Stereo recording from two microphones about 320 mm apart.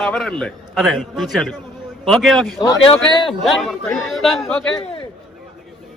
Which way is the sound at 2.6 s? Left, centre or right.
Centre.